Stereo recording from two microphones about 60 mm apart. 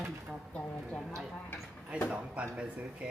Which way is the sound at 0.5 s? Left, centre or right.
Centre.